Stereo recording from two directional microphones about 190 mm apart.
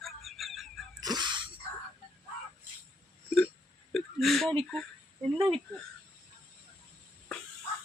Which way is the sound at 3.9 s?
Centre (ahead or behind).